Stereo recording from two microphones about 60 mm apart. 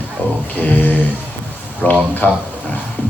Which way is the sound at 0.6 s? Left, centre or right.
Left.